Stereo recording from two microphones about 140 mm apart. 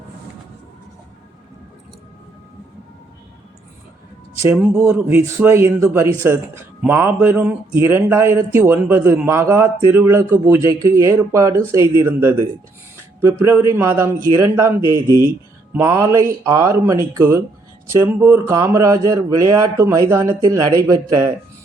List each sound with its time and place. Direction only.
4.5 s a man's voice: 15° right (ahead or behind)